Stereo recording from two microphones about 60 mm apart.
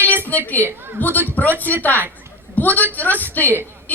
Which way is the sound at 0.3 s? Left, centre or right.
Left.